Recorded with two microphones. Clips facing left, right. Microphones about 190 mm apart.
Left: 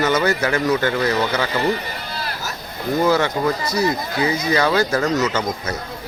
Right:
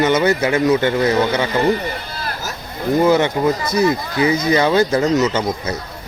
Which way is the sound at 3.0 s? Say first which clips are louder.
Right 3 dB; 20° right (ahead or behind).